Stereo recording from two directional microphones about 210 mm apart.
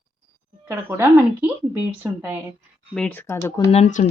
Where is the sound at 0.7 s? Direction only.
10° right (ahead or behind).